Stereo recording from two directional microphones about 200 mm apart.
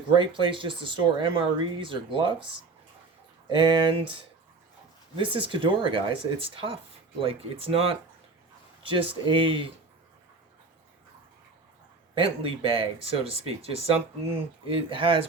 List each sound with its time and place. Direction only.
0.2 s speech: 25° right (ahead or behind)
3.5 s speech: 25° right (ahead or behind)
5.1 s speech: 25° right (ahead or behind)
12.1 s speech: 25° right (ahead or behind)